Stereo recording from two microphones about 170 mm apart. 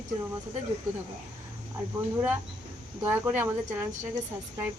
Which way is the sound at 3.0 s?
10° right (ahead or behind).